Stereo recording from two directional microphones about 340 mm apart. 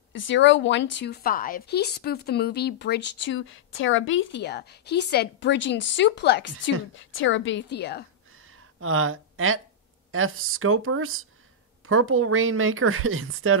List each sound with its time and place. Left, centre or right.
0.1 s a woman's voice: left
8.4 s a sound: right
10.1 s speech: right